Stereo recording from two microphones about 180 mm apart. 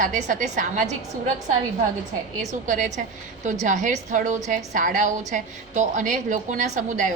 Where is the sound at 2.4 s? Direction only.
40° right (ahead or behind).